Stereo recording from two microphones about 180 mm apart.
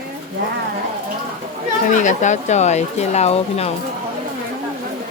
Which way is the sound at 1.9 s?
45° left (ahead or behind).